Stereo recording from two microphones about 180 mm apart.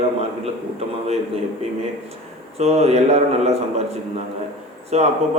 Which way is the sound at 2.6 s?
35° right (ahead or behind).